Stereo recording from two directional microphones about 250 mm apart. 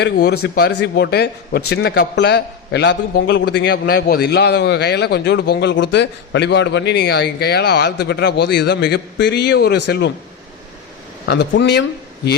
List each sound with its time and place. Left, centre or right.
0.0 s a man's voice: left
11.3 s a man's voice: left